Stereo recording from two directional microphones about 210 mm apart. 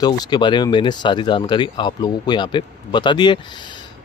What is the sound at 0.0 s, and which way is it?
Speech, 20° left (ahead or behind).